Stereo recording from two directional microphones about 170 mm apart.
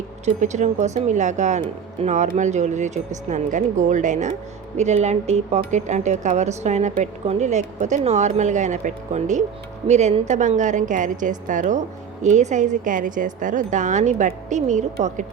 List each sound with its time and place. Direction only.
0.3 s speech: 45° right (ahead or behind)